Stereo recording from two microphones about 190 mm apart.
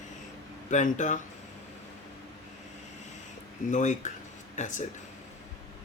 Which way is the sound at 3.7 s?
40° left (ahead or behind).